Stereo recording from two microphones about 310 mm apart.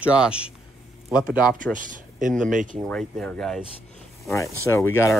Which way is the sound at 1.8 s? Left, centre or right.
Right.